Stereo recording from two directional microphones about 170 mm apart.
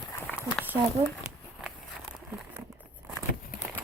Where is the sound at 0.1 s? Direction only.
10° left (ahead or behind).